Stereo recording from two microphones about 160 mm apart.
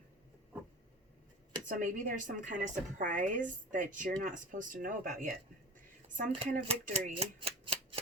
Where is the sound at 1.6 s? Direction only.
55° right (ahead or behind).